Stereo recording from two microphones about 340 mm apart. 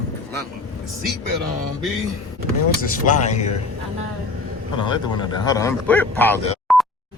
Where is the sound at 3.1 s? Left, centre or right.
Left.